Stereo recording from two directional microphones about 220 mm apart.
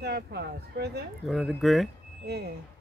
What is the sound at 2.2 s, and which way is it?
Speech, 50° right (ahead or behind).